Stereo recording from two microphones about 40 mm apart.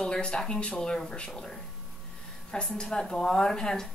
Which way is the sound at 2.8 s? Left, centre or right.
Centre.